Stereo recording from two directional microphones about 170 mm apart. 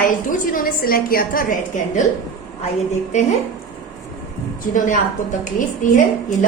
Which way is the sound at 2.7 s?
45° left (ahead or behind).